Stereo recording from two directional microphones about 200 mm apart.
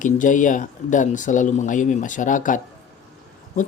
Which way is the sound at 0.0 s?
40° left (ahead or behind).